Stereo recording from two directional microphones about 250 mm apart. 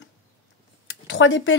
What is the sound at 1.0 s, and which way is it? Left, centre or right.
Speech, left.